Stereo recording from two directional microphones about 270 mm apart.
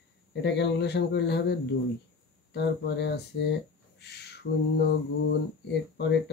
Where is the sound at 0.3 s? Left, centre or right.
Left.